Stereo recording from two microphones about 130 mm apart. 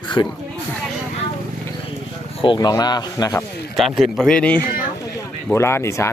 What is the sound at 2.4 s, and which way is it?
A man's voice, 35° left (ahead or behind).